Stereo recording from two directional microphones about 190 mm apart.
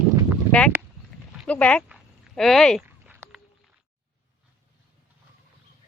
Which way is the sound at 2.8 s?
10° right (ahead or behind).